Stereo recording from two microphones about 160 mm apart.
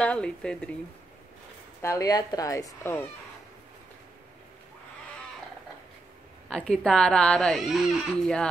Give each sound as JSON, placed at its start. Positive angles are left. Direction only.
{"t": 0.0, "sound": "speech", "side_deg": 5}
{"t": 1.8, "sound": "speech", "side_deg": 20}
{"t": 6.5, "sound": "speech", "side_deg": 5}